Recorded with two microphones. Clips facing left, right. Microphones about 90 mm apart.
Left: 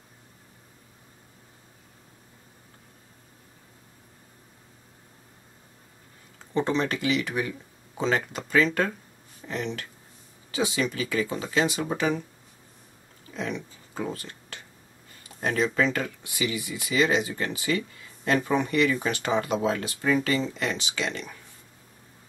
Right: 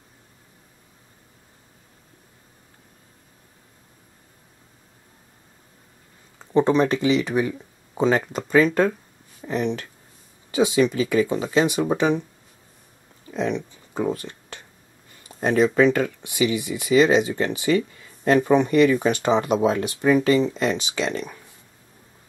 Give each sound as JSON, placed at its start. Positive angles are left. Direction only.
{"t": 6.5, "sound": "speech", "side_deg": -20}
{"t": 13.3, "sound": "speech", "side_deg": -20}